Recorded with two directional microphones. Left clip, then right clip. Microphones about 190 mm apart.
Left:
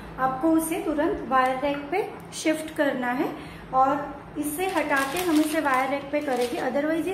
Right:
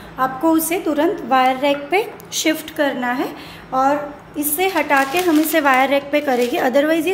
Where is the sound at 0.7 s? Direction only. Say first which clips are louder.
Right 7 dB; 55° right (ahead or behind).